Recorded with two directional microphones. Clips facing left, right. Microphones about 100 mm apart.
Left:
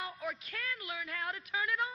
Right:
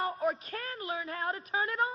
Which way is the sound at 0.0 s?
40° right (ahead or behind).